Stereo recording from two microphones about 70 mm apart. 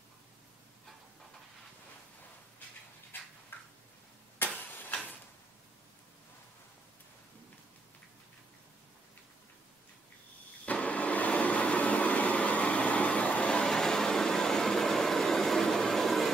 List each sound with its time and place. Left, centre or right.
3.5 s a sound: left
4.4 s vehicle: left
10.6 s vacuum cleaner: centre